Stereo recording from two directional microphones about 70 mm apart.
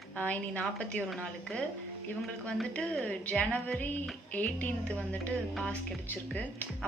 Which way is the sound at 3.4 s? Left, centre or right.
Left.